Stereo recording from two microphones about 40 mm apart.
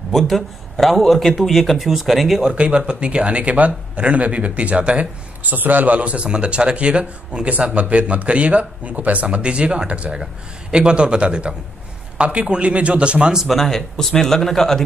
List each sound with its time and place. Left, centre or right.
0.1 s a man's voice: centre
2.5 s a man's voice: right
5.4 s speech: right
9.2 s a man's voice: right
13.5 s speech: centre